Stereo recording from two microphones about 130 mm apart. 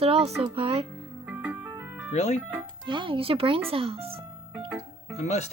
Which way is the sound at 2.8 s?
40° right (ahead or behind).